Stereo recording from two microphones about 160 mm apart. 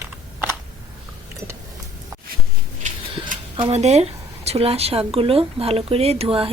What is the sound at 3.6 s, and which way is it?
Speech, 40° right (ahead or behind).